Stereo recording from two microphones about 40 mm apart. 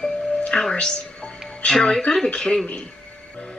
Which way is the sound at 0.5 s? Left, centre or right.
Centre.